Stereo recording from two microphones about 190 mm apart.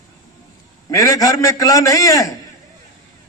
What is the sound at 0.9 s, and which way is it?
A man's voice, 20° left (ahead or behind).